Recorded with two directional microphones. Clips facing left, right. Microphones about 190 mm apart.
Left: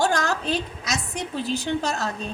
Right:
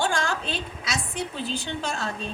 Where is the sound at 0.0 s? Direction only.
40° left (ahead or behind).